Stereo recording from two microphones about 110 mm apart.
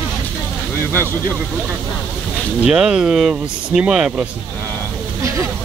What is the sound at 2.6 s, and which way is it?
Speech, 5° right (ahead or behind).